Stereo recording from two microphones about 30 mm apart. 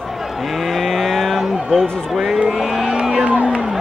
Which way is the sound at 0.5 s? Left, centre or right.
Centre.